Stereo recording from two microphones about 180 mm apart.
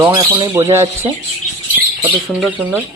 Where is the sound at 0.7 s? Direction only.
15° right (ahead or behind).